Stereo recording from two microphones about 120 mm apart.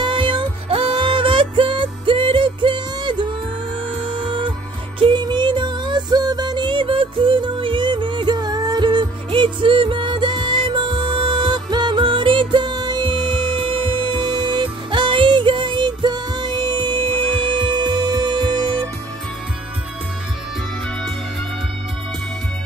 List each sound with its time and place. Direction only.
0.0 s music: 40° right (ahead or behind)